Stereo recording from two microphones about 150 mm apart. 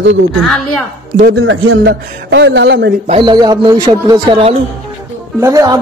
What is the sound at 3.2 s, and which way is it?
Speech, 30° right (ahead or behind).